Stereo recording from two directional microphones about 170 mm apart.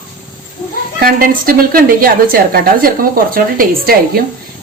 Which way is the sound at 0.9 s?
60° right (ahead or behind).